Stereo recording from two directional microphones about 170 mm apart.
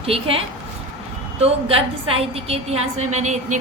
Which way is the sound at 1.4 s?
35° right (ahead or behind).